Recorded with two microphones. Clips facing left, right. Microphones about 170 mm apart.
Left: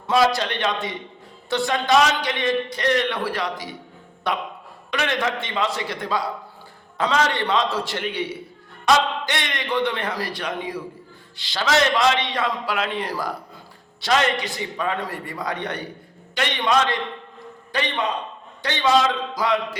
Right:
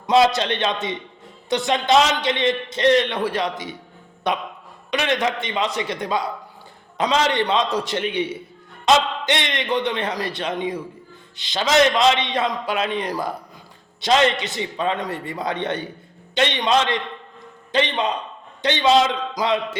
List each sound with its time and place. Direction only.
0.1 s a man's voice: 20° right (ahead or behind)